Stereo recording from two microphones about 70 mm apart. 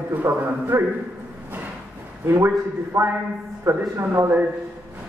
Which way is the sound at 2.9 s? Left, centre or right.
Right.